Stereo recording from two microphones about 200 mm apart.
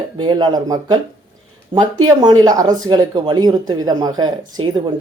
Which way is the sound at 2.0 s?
20° right (ahead or behind).